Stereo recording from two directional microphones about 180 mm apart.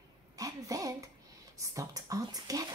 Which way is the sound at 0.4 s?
20° right (ahead or behind).